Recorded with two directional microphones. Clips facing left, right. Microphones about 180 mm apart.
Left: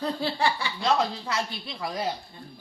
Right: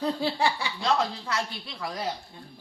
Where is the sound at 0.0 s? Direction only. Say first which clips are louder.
Right 1 dB; 15° right (ahead or behind).